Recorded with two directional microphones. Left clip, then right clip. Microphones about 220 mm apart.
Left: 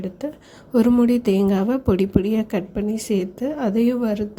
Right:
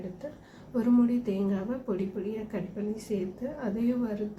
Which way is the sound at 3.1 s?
45° left (ahead or behind).